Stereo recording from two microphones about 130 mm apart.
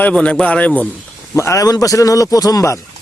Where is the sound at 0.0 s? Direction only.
10° left (ahead or behind).